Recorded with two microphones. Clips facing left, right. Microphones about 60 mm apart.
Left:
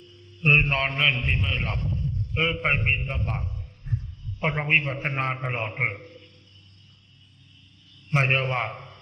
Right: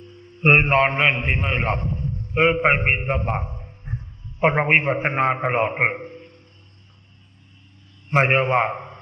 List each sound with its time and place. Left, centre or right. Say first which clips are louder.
0.0 s a man's voice: right 6 dB; right
8.1 s a man's voice: right 6 dB; right